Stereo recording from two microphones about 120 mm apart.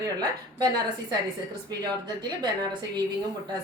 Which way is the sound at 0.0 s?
35° right (ahead or behind).